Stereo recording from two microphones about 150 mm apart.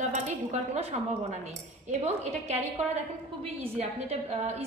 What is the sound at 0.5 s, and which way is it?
Speech, 50° right (ahead or behind).